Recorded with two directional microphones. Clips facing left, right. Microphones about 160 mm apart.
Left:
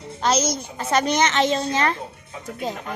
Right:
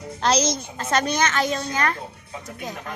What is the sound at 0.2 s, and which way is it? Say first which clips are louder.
A child's voice: even; 5° left (ahead or behind).